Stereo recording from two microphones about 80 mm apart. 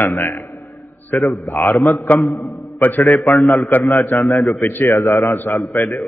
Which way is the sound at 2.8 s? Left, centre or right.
Left.